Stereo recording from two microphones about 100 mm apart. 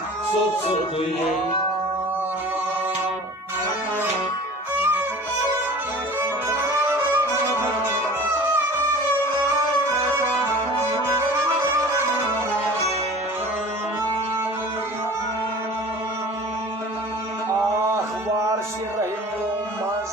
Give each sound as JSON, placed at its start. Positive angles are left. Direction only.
{"t": 4.7, "sound": "music", "side_deg": -20}
{"t": 6.1, "sound": "music", "side_deg": -20}